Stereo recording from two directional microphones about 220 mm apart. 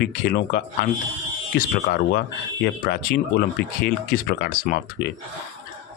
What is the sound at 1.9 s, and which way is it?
Speech, 45° left (ahead or behind).